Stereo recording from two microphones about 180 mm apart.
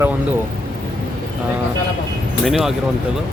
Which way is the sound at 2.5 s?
Centre (ahead or behind).